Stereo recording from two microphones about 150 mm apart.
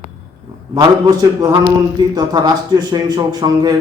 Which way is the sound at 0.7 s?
25° right (ahead or behind).